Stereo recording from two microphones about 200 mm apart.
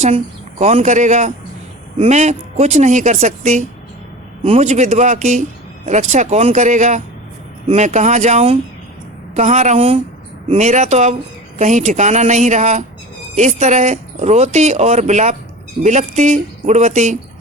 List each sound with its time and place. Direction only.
0.6 s speech: 35° right (ahead or behind)